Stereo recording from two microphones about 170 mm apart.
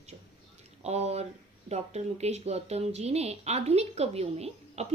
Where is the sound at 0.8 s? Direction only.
40° right (ahead or behind).